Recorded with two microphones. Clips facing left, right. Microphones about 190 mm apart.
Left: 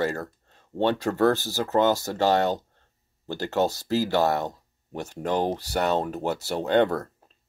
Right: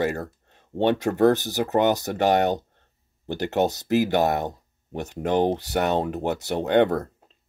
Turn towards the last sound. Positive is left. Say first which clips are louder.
# right 2 dB
turn(degrees=-20)  # may be behind; listen again after turning